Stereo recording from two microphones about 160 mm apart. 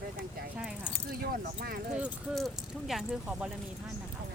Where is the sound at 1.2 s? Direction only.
70° right (ahead or behind).